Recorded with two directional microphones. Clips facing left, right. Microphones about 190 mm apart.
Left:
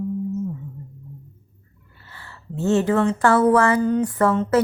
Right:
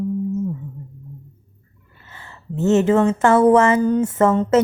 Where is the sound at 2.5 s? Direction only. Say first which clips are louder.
Right 4 dB; 20° right (ahead or behind).